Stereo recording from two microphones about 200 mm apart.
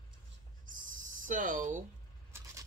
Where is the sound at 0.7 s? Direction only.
40° right (ahead or behind).